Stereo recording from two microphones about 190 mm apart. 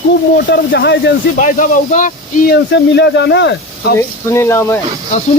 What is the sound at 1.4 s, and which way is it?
Speech, 40° left (ahead or behind).